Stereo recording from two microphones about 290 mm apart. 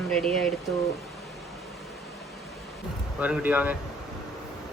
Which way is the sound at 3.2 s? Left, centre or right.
Centre.